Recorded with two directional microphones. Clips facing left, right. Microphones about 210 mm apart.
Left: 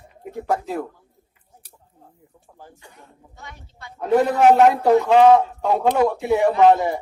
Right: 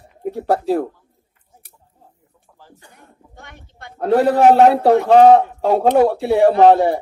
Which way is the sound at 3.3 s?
55° right (ahead or behind).